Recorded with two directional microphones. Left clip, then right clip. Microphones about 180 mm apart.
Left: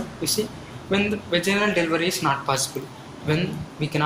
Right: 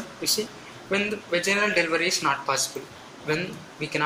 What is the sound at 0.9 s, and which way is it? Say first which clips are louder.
Speech: left 2 dB; 5° right (ahead or behind).